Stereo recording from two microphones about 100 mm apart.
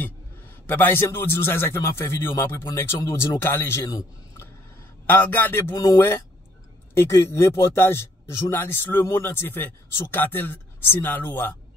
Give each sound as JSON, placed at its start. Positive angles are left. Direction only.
{"t": 0.7, "sound": "a man's voice", "side_deg": 20}
{"t": 5.0, "sound": "a man's voice", "side_deg": 20}